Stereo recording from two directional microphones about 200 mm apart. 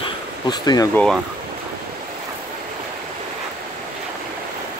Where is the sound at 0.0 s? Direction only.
20° left (ahead or behind).